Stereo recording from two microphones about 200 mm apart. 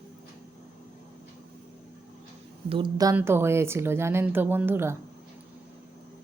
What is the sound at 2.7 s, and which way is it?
A woman's voice, 20° right (ahead or behind).